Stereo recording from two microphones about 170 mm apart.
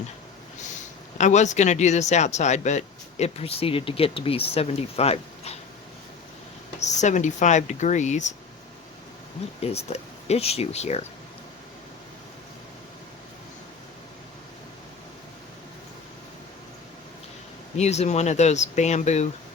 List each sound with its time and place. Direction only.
1.2 s speech: 45° left (ahead or behind)
6.7 s speech: 45° left (ahead or behind)
9.4 s speech: 40° left (ahead or behind)
17.7 s speech: 40° left (ahead or behind)